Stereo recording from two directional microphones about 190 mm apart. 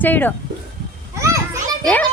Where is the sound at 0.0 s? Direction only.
10° left (ahead or behind).